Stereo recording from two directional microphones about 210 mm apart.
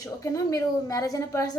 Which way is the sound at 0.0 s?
15° left (ahead or behind).